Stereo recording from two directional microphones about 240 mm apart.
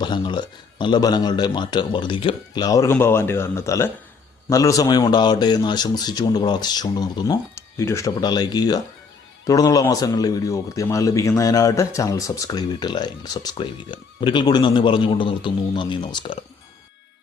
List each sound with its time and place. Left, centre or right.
0.0 s speech: centre